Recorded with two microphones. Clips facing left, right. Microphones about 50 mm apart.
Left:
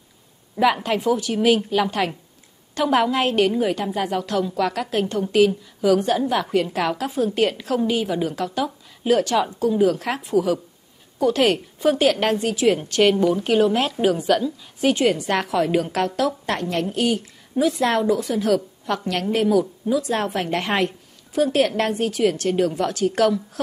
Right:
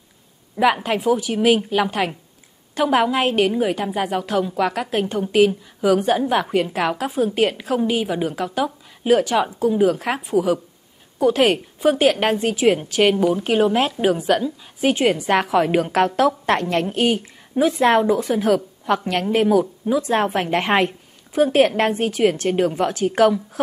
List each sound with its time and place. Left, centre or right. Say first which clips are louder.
0.6 s a woman's voice: right 1 dB; centre
12.7 s a woman's voice: even; centre
15.5 s a woman's voice: right 3 dB; right